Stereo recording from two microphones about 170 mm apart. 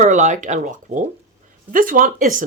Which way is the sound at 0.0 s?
45° right (ahead or behind).